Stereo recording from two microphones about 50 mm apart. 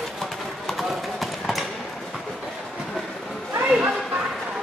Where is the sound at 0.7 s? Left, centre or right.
Centre.